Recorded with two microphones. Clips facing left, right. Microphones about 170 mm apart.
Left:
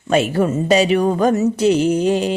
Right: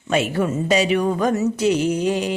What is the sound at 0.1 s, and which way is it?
Speech, 35° left (ahead or behind).